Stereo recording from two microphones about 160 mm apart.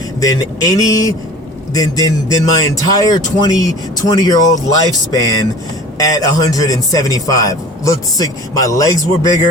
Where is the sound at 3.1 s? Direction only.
25° left (ahead or behind).